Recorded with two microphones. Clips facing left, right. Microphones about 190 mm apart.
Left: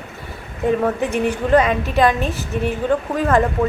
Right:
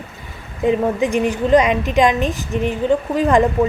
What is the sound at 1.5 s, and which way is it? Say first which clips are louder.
Speech: right 2 dB; 15° right (ahead or behind).